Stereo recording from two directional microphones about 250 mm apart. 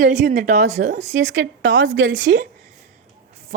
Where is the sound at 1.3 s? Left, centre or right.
Right.